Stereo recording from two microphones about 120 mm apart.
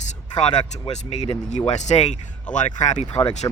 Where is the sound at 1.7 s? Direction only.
75° left (ahead or behind).